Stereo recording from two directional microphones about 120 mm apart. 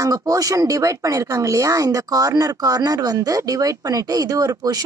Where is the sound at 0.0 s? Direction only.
30° right (ahead or behind).